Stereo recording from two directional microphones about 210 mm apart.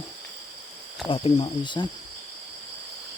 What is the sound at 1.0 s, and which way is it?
Speech, 25° left (ahead or behind).